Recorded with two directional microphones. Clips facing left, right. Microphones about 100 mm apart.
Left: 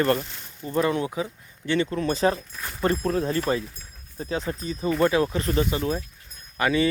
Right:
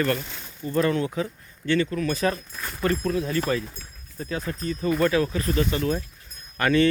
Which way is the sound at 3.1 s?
40° left (ahead or behind).